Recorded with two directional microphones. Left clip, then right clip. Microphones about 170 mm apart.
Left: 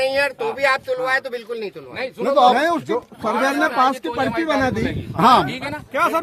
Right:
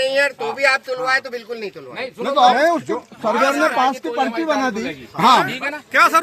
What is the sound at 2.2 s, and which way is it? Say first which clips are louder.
Speech: even; 65° left (ahead or behind).